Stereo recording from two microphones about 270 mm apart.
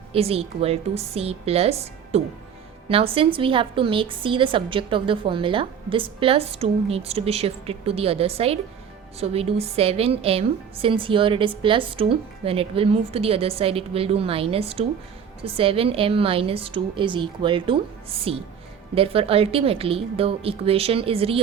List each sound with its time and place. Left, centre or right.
0.1 s a woman's voice: right